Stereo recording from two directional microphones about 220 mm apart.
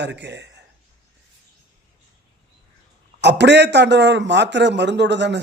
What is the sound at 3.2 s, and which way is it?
A man's voice, 50° right (ahead or behind).